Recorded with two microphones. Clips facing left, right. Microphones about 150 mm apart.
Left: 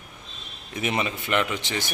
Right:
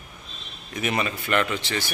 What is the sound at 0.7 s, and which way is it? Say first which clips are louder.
A man's voice: even; 25° left (ahead or behind).